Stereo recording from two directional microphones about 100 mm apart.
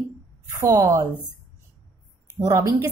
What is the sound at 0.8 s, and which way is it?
Speech, 30° right (ahead or behind).